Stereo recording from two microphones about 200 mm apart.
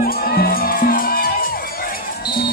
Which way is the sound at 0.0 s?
50° left (ahead or behind).